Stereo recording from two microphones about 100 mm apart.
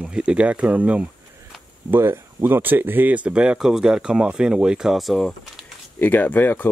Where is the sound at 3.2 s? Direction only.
10° right (ahead or behind).